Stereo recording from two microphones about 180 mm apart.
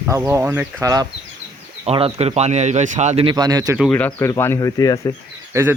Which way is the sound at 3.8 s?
10° left (ahead or behind).